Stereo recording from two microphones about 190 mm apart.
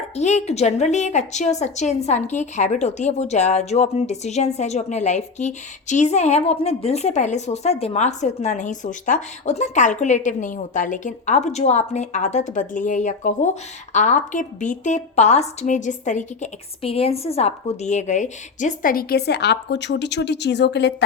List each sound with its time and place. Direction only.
0.2 s a woman's voice: 35° left (ahead or behind); by 20.9 s 65° left (ahead or behind)